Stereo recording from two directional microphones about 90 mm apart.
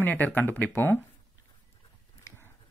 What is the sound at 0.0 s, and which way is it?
Speech, 20° left (ahead or behind).